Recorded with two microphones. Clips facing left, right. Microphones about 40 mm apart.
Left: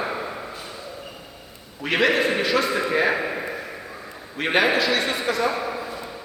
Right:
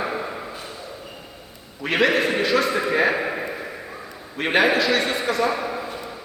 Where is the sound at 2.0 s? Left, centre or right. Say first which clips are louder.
Right 1 dB; centre.